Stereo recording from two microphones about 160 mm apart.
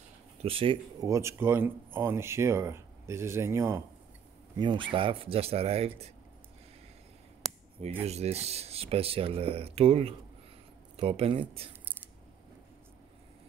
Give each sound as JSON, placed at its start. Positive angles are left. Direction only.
{"t": 0.4, "sound": "speech", "side_deg": -35}
{"t": 1.0, "sound": "speech", "side_deg": -20}
{"t": 4.6, "sound": "speech", "side_deg": -30}
{"t": 8.0, "sound": "speech", "side_deg": -40}